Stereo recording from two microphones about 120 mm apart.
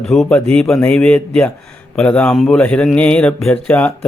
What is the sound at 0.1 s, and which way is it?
Speech, 5° left (ahead or behind).